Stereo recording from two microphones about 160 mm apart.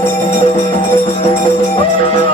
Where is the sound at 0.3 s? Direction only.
40° left (ahead or behind).